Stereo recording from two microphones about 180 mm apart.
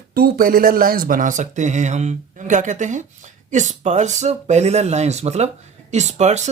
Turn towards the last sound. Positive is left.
turn(degrees=-40)  # may be behind; listen again after turning